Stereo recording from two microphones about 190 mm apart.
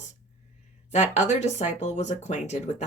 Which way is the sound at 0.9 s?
40° left (ahead or behind).